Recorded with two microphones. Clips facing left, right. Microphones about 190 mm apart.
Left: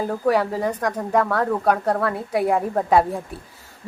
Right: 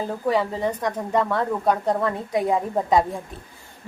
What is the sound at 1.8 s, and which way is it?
Speech, 15° right (ahead or behind).